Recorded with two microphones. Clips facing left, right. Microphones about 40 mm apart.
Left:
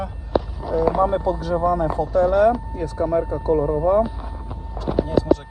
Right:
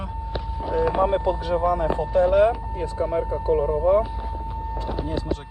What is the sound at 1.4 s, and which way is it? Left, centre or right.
Speech, right.